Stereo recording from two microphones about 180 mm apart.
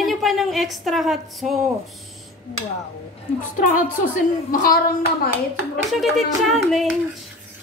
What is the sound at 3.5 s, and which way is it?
A woman's voice, 45° left (ahead or behind).